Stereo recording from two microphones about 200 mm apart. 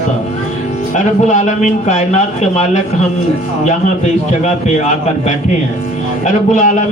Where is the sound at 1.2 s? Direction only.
35° left (ahead or behind).